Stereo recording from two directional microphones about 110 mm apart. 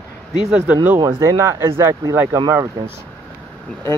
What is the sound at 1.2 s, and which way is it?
Speech, 25° right (ahead or behind).